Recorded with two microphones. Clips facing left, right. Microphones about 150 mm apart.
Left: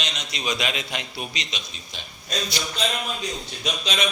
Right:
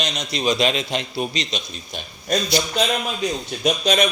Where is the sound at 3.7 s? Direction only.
45° right (ahead or behind).